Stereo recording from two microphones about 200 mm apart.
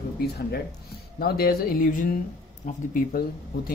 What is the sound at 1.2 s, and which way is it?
Speech, 50° left (ahead or behind).